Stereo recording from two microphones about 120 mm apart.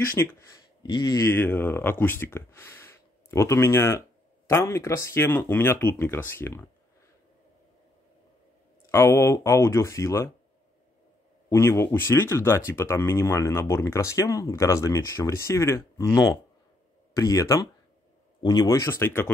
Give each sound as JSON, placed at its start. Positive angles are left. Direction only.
{"t": 0.0, "sound": "speech", "side_deg": 25}
{"t": 0.8, "sound": "speech", "side_deg": 35}
{"t": 8.9, "sound": "speech", "side_deg": 25}
{"t": 11.4, "sound": "speech", "side_deg": 25}